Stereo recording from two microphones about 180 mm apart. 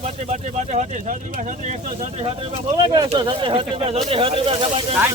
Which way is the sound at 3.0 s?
25° right (ahead or behind).